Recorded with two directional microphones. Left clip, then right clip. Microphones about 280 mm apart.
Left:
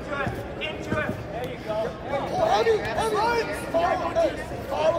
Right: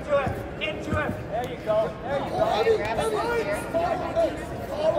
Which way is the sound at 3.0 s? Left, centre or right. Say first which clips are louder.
Left 2 dB; left.